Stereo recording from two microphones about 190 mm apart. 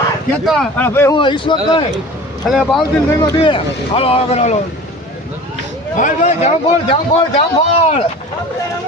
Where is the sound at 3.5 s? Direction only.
30° left (ahead or behind).